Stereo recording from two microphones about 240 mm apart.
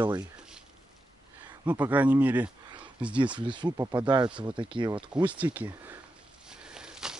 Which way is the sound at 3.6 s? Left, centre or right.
Centre.